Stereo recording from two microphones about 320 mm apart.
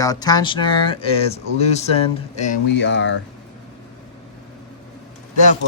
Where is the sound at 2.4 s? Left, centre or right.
Left.